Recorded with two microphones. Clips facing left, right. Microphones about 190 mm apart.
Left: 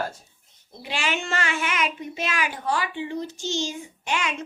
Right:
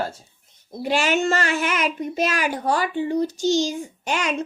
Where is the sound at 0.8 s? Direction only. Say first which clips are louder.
Right 8 dB; 45° right (ahead or behind).